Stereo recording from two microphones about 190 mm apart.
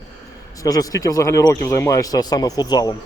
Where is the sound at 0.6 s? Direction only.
20° left (ahead or behind).